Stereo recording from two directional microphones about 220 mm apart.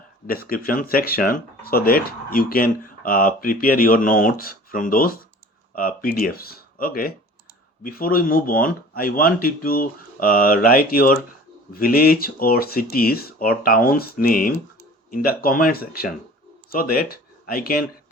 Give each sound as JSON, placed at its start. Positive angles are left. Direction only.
{"t": 0.3, "sound": "speech", "side_deg": 40}